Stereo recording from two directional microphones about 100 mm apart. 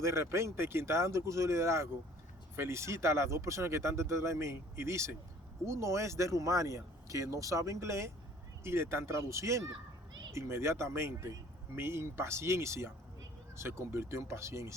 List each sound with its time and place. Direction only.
0.0 s speech: 25° right (ahead or behind)